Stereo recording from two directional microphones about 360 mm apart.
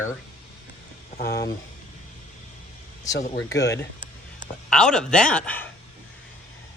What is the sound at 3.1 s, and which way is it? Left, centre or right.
Speech, left.